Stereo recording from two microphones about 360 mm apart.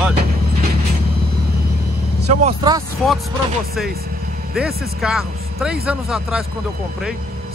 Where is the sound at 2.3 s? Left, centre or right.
Centre.